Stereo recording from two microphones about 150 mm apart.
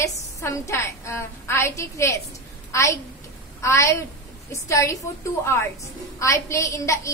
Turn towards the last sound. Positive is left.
turn(degrees=20)  # may be behind; listen again after turning